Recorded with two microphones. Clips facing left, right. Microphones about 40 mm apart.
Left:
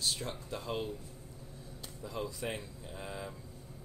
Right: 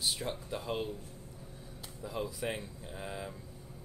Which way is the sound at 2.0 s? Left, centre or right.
Centre.